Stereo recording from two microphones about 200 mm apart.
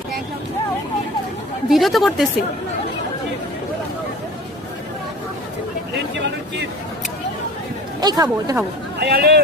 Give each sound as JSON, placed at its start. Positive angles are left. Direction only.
{"t": 1.7, "sound": "a woman's voice", "side_deg": 0}
{"t": 8.0, "sound": "speech", "side_deg": -20}
{"t": 9.0, "sound": "a man's voice", "side_deg": -50}